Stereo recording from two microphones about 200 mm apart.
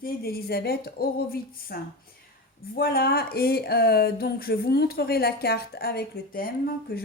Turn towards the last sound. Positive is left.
turn(degrees=50)  # may be behind; listen again after turning